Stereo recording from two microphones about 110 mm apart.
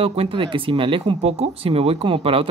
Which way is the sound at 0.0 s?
60° right (ahead or behind).